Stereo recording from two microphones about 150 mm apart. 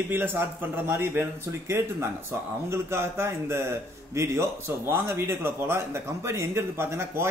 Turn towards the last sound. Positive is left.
turn(degrees=-15)  # may be behind; listen again after turning